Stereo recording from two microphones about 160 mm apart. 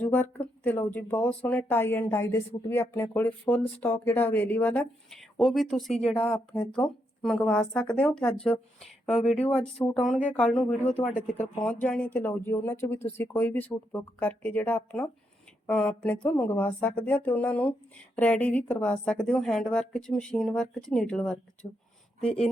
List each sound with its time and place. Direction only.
0.0 s speech: 10° left (ahead or behind)
5.4 s speech: centre (ahead or behind)
5.9 s speech: 40° left (ahead or behind)
6.2 s speech: 10° left (ahead or behind)